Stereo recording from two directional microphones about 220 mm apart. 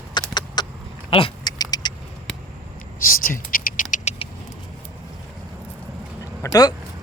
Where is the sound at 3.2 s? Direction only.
40° left (ahead or behind).